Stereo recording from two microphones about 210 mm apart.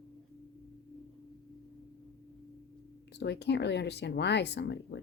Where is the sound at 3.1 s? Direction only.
55° left (ahead or behind).